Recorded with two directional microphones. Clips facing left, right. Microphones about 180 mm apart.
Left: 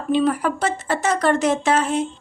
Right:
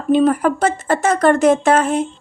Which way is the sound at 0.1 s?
50° right (ahead or behind).